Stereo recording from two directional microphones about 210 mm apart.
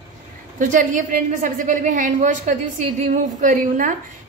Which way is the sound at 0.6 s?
40° right (ahead or behind).